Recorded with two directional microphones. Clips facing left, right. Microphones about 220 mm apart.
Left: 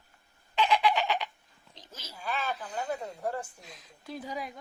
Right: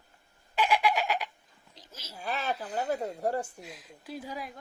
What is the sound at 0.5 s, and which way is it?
Fowl, 10° right (ahead or behind).